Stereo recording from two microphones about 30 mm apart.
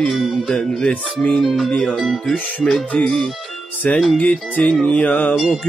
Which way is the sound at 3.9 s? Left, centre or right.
Left.